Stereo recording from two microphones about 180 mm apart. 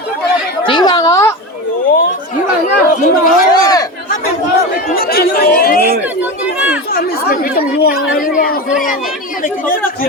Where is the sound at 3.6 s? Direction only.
20° left (ahead or behind).